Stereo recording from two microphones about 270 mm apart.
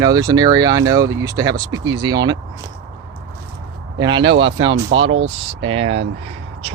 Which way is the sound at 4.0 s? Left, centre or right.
Centre.